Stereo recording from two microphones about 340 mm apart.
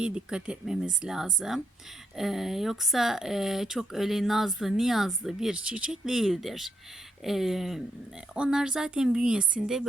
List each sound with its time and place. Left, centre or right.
0.0 s speech: centre